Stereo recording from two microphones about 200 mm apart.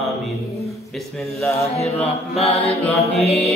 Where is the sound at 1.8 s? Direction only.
30° left (ahead or behind).